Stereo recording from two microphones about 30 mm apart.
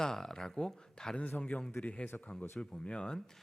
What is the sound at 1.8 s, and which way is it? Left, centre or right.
Speech, left.